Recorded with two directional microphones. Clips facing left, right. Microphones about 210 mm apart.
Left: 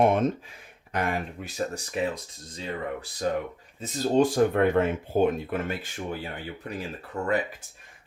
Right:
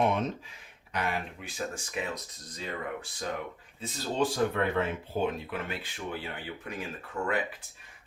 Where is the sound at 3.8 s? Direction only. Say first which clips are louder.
Left 8 dB; 45° left (ahead or behind).